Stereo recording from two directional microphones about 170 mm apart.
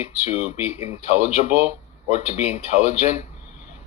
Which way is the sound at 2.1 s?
40° left (ahead or behind).